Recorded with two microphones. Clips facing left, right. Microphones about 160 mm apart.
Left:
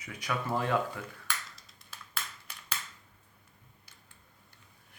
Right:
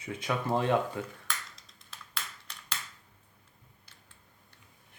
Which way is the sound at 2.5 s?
10° left (ahead or behind).